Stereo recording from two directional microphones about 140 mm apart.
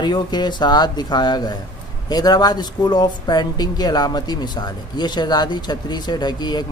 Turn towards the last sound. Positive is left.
turn(degrees=30)  # may be behind; listen again after turning